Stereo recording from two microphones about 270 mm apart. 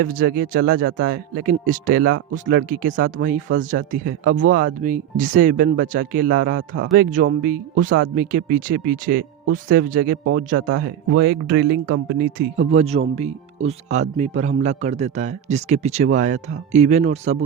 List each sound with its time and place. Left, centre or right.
0.0 s speech: right